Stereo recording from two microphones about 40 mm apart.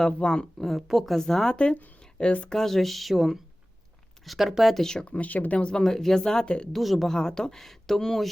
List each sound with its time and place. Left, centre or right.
0.2 s speech: left
0.6 s speech: centre
1.3 s speech: centre
1.5 s speech: left
2.5 s speech: centre
3.2 s speech: centre
5.0 s speech: left
5.7 s speech: centre
6.4 s speech: left
6.7 s speech: centre
7.1 s speech: centre